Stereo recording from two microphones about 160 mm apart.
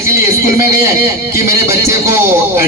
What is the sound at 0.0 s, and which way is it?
A man's voice, 15° right (ahead or behind).